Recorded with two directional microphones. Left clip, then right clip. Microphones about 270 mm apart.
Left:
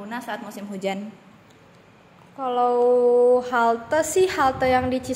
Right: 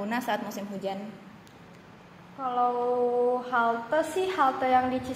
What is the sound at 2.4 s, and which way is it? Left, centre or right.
A woman's voice, left.